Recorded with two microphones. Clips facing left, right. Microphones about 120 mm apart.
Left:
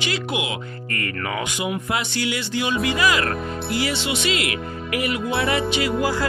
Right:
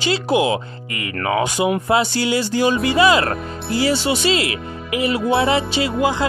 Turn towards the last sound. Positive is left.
turn(degrees=-20)  # may be behind; listen again after turning